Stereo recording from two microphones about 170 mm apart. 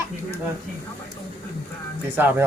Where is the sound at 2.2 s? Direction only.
10° right (ahead or behind).